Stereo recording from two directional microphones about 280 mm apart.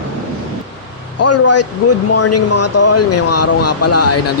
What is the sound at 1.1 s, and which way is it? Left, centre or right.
Speech, left.